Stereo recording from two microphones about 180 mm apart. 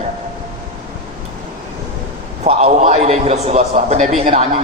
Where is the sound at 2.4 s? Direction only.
35° right (ahead or behind).